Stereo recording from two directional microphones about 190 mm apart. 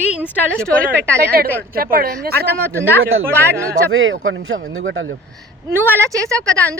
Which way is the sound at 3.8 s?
90° right.